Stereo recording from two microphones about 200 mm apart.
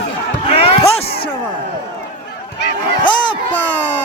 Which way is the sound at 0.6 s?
30° left (ahead or behind).